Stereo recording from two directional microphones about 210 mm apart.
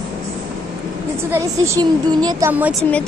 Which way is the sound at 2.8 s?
5° left (ahead or behind).